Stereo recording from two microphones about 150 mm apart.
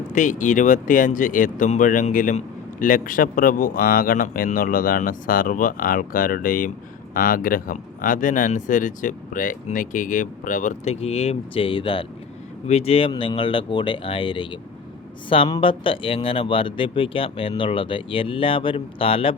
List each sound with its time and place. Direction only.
0.1 s speech: 55° left (ahead or behind)
2.8 s a man's voice: 65° left (ahead or behind); by 19.4 s 40° left (ahead or behind)